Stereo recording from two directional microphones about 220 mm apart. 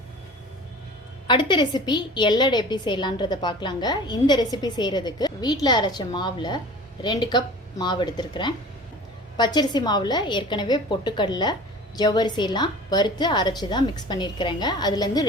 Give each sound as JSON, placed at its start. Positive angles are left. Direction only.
{"t": 1.3, "sound": "a woman's voice", "side_deg": 20}